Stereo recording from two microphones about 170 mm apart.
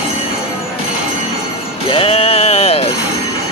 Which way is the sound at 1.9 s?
35° left (ahead or behind).